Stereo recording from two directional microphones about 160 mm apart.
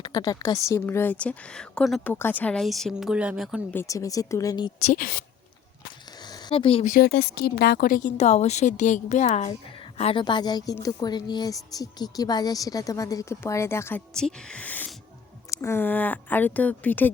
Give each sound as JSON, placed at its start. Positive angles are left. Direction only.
{"t": 0.0, "sound": "speech", "side_deg": 25}
{"t": 3.7, "sound": "a woman's voice", "side_deg": 15}
{"t": 4.9, "sound": "speech", "side_deg": 60}
{"t": 6.2, "sound": "a sound", "side_deg": 25}
{"t": 7.0, "sound": "a woman's voice", "side_deg": 90}
{"t": 10.0, "sound": "a woman's voice", "side_deg": 35}
{"t": 14.1, "sound": "speech", "side_deg": 5}